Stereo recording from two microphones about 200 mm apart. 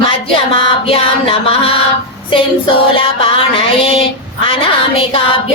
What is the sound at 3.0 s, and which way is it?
Mantra, 25° left (ahead or behind).